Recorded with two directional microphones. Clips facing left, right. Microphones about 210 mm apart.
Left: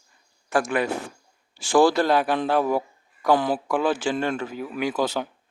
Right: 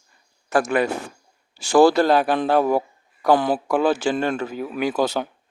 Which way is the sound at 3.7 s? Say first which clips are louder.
Right 5 dB; 40° right (ahead or behind).